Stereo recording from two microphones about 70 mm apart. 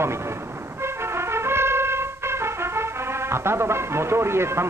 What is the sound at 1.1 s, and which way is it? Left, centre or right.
Brass instrument, right.